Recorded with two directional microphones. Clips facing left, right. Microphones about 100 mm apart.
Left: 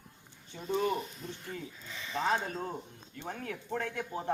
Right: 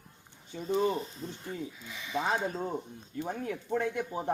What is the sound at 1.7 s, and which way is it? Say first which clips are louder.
Speech: right 3 dB; 5° right (ahead or behind).